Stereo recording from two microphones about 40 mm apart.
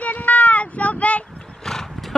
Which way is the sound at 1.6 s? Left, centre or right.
Centre.